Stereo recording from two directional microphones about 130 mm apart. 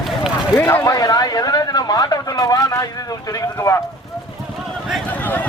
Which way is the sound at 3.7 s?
25° left (ahead or behind).